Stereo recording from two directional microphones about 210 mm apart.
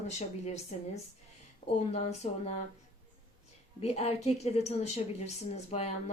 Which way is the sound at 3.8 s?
30° left (ahead or behind).